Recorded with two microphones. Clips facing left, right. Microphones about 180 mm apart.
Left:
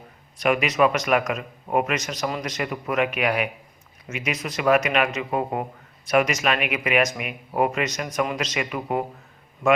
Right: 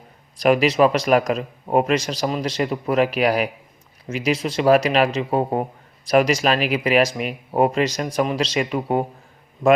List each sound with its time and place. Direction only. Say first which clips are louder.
0.3 s a man's voice: right 5 dB; 35° right (ahead or behind)